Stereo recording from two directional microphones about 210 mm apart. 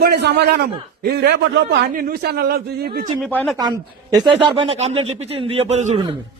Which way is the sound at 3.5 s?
20° right (ahead or behind).